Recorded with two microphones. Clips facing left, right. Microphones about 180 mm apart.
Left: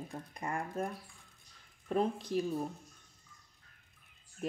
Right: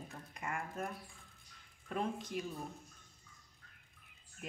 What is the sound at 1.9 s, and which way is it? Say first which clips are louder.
Speech: left 6 dB; 35° left (ahead or behind).